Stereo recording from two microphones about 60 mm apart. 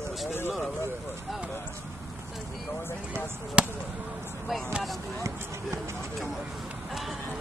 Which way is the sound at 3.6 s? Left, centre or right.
Centre.